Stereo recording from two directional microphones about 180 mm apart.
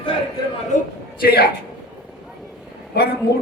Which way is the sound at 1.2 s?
60° left (ahead or behind).